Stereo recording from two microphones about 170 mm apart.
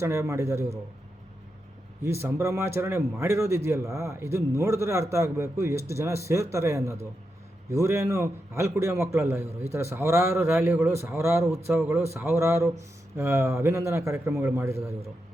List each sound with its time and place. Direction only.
0.0 s a man's voice: 15° right (ahead or behind)
2.0 s a man's voice: 15° right (ahead or behind)